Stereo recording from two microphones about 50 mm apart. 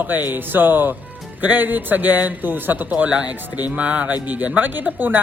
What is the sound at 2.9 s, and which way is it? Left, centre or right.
A man's voice, right.